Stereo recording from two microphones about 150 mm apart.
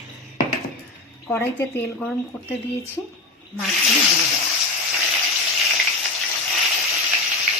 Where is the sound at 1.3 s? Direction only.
15° left (ahead or behind).